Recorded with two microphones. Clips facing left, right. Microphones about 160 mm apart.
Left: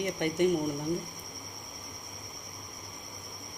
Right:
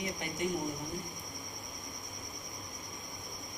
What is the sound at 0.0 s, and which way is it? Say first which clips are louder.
Speech: left 9 dB; 65° left (ahead or behind).